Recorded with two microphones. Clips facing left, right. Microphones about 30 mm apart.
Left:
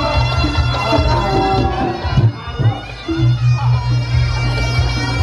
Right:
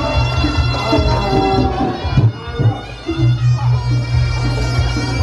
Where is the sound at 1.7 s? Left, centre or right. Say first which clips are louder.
Even; centre.